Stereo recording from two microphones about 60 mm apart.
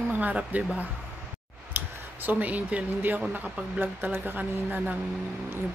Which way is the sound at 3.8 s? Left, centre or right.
Right.